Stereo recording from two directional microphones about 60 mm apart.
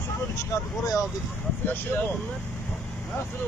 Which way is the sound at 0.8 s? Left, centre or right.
Left.